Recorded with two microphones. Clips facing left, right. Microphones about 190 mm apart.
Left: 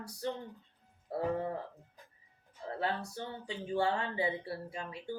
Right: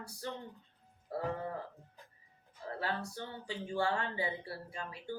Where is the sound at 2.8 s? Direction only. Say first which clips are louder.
Left 3 dB; 25° left (ahead or behind).